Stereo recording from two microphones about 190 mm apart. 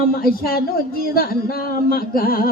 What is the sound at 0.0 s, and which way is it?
Speech, 50° left (ahead or behind).